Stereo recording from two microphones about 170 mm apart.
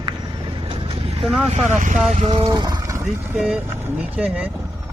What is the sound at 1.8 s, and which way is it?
Speech, 50° right (ahead or behind).